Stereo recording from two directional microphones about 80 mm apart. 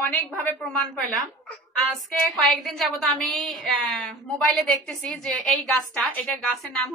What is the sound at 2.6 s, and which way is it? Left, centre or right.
A woman's voice, centre.